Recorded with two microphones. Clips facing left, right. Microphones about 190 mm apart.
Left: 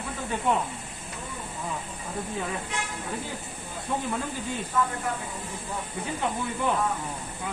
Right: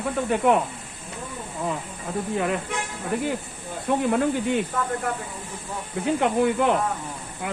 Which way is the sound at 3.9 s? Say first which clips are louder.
Right 7 dB; 70° right (ahead or behind).